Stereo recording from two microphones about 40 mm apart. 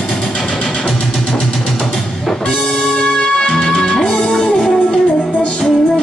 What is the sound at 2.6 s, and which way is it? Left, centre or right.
Music, left.